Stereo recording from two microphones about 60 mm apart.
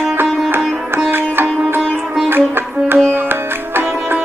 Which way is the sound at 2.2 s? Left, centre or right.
Right.